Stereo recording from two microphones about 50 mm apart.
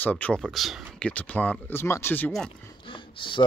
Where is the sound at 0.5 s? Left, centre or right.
Centre.